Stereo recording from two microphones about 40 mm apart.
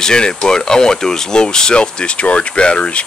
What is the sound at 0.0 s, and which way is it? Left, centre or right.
Speech, centre.